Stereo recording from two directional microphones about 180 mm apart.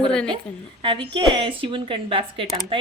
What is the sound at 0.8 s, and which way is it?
Speech, 30° right (ahead or behind).